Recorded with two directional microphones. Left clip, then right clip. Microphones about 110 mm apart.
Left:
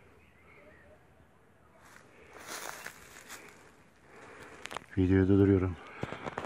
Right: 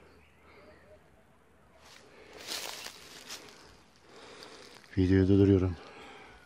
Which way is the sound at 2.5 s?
30° right (ahead or behind).